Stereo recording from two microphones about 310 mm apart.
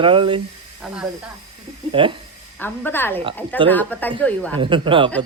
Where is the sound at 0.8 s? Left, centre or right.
Centre.